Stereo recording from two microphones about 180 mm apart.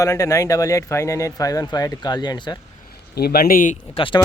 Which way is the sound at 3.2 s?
60° left (ahead or behind).